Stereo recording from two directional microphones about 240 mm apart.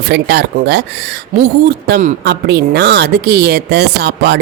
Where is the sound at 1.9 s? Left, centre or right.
Right.